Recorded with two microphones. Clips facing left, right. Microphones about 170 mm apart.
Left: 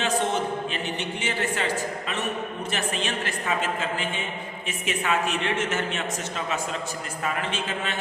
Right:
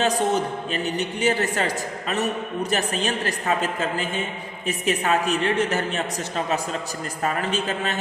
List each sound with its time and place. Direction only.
0.0 s a man's voice: 40° right (ahead or behind)